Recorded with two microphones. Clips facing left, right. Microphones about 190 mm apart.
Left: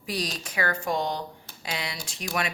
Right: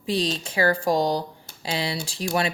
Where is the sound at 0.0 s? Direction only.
25° right (ahead or behind).